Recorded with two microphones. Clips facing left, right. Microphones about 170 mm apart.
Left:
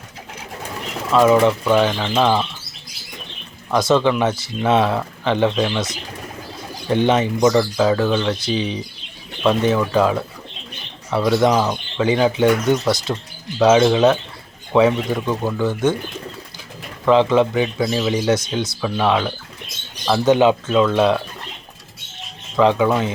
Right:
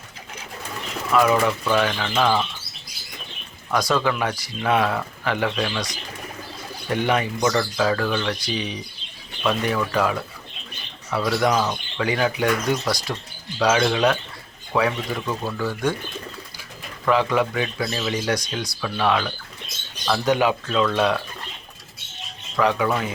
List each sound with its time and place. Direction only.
1.1 s speech: 25° left (ahead or behind)
3.7 s speech: 25° left (ahead or behind)
6.9 s speech: 25° left (ahead or behind)
17.1 s speech: 25° left (ahead or behind)
22.5 s speech: 25° left (ahead or behind)